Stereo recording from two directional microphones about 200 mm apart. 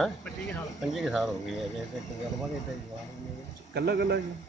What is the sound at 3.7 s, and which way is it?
Speech, 55° right (ahead or behind).